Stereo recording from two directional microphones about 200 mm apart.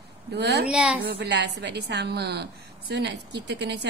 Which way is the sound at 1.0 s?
60° right (ahead or behind).